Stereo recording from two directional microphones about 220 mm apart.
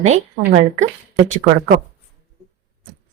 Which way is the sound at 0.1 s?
30° right (ahead or behind).